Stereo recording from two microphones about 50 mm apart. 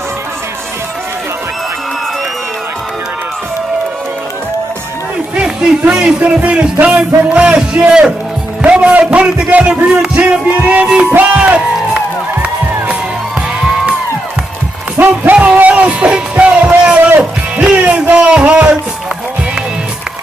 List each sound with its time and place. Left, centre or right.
5.3 s a sound: right
5.9 s a man's voice: centre
8.6 s music: right
9.5 s a man's voice: right
10.2 s a man's voice: right
11.1 s music: right
11.4 s music: right
15.0 s speech: right
15.3 s music: right
18.1 s a sound: right